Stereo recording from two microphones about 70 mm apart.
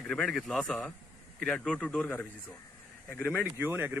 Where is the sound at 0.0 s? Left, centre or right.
Centre.